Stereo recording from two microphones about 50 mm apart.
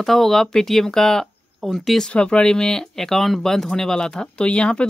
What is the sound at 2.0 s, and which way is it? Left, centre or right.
Speech, centre.